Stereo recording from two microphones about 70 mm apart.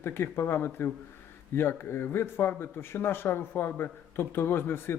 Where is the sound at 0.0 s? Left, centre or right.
Left.